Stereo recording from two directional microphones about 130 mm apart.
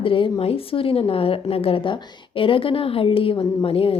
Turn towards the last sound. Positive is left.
turn(degrees=45)  # may be behind; listen again after turning